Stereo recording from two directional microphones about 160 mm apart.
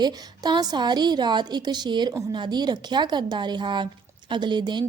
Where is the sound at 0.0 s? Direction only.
25° right (ahead or behind).